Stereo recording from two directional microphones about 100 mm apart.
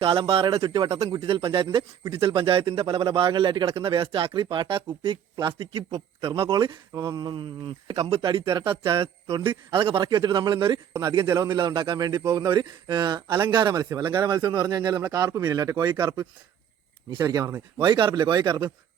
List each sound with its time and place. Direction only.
0.0 s speech: 65° right (ahead or behind)
0.9 s speech: 90° right
1.1 s a man's voice: 60° right (ahead or behind)
3.2 s speech: 55° right (ahead or behind)
6.9 s speech: 40° right (ahead or behind); by 8.2 s 80° right
8.2 s speech: 55° right (ahead or behind)
9.3 s a man's voice: 50° right (ahead or behind)
17.7 s a man's voice: 50° right (ahead or behind)